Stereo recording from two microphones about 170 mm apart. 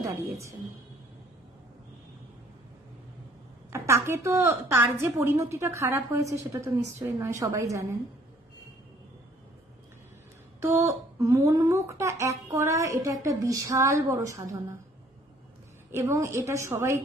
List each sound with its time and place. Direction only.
0.0 s a woman's voice: 20° right (ahead or behind)
3.7 s a woman's voice: 15° right (ahead or behind)
10.6 s speech: 15° right (ahead or behind)
15.9 s a woman's voice: 15° right (ahead or behind)